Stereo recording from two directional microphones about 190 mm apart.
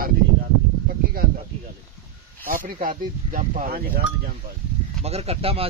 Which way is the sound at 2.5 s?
45° right (ahead or behind).